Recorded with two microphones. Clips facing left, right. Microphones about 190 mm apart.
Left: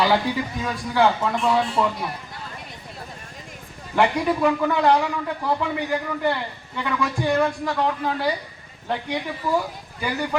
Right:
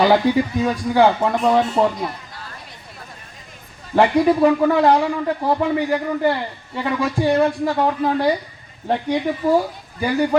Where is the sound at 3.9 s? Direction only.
35° right (ahead or behind).